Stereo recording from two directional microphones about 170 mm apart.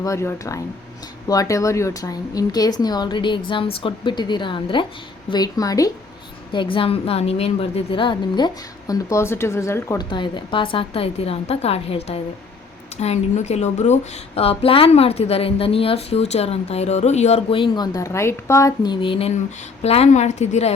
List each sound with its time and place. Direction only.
0.0 s a woman's voice: 15° left (ahead or behind)
10.1 s speech: 25° left (ahead or behind)